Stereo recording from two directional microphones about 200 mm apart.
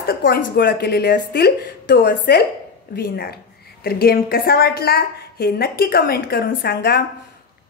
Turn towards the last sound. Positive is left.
turn(degrees=50)  # may be behind; listen again after turning